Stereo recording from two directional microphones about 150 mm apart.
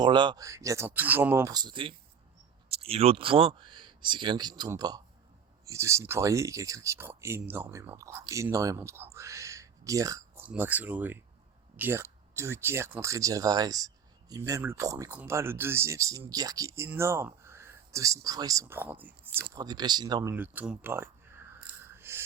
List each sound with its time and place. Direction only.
0.0 s speech: 30° right (ahead or behind); by 1.5 s 15° right (ahead or behind)
1.5 s speech: 30° right (ahead or behind)
9.1 s a sound: 20° right (ahead or behind)
10.4 s speech: 10° right (ahead or behind)
19.6 s speech: 25° right (ahead or behind)
20.3 s a sound: 10° right (ahead or behind)